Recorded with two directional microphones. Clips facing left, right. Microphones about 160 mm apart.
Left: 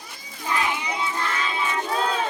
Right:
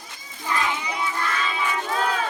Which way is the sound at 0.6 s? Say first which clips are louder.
Even; 15° left (ahead or behind).